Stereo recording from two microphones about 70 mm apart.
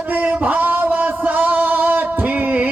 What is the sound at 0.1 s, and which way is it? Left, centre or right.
Music, right.